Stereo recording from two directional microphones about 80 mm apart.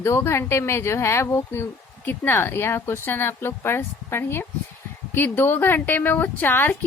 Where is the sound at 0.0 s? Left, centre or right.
Left.